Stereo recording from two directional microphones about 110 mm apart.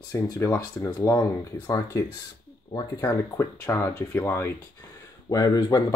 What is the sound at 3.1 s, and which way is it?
Speech, 20° left (ahead or behind).